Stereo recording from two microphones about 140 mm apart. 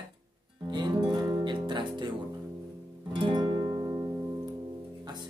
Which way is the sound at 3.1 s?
35° right (ahead or behind).